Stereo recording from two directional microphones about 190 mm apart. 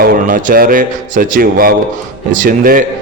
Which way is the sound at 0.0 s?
45° right (ahead or behind).